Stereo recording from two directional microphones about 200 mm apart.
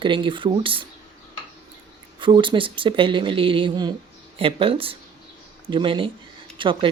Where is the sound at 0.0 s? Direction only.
25° right (ahead or behind).